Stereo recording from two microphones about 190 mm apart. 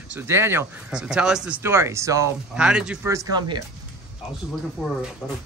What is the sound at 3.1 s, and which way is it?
Speech, 20° right (ahead or behind).